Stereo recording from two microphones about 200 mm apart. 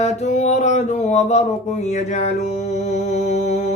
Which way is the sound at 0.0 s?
35° left (ahead or behind).